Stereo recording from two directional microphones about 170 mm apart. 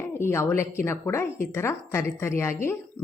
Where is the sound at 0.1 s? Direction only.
15° left (ahead or behind).